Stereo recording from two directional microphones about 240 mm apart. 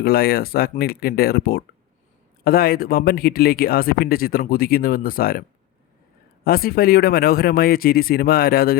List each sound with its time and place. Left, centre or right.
0.0 s speech: left